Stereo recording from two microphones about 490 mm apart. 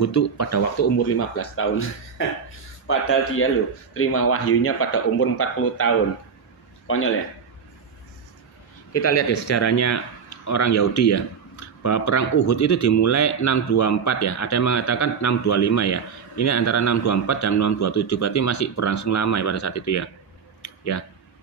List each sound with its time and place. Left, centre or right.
0.0 s speech: left
8.9 s speech: left
20.6 s a sound: left